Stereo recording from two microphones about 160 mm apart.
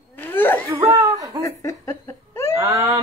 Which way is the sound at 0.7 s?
20° right (ahead or behind).